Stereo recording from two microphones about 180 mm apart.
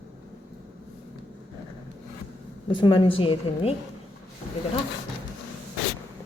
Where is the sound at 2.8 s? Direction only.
30° left (ahead or behind).